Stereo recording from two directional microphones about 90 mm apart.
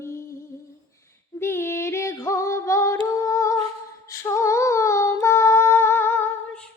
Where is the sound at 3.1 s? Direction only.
35° left (ahead or behind).